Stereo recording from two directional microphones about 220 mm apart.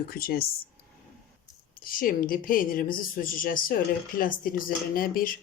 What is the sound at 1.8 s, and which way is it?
Speech, 40° left (ahead or behind).